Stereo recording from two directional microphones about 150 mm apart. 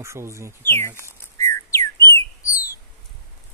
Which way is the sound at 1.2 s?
20° left (ahead or behind).